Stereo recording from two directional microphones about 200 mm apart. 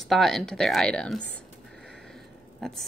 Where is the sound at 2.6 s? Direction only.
5° left (ahead or behind).